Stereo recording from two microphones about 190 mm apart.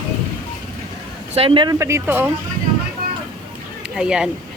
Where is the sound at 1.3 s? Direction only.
30° right (ahead or behind).